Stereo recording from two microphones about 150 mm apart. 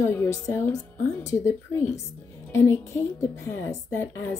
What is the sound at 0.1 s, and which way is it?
Speech, 15° left (ahead or behind).